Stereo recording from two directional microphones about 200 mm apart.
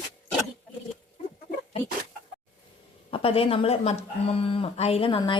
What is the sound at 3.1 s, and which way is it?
Speech, 25° left (ahead or behind).